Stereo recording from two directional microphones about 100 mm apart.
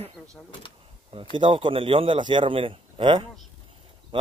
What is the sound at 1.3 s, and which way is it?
A man's voice, 55° right (ahead or behind).